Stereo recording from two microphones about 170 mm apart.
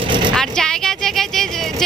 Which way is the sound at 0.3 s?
5° left (ahead or behind).